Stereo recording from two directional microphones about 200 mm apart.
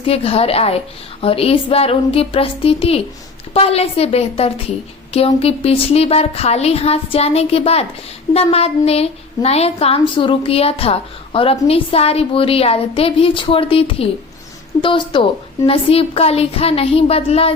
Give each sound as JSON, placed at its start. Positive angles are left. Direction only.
{"t": 0.0, "sound": "a woman's voice", "side_deg": 30}